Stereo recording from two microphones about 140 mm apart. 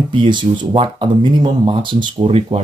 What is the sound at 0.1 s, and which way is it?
Speech, 35° right (ahead or behind).